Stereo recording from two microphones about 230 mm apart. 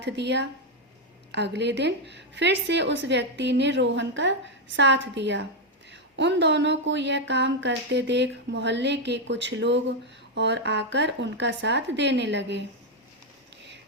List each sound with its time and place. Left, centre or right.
0.0 s speech: right